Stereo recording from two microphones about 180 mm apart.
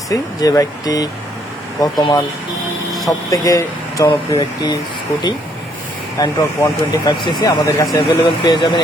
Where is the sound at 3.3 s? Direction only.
20° left (ahead or behind).